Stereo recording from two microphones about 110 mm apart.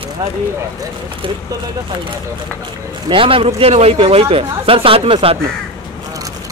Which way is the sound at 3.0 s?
50° right (ahead or behind).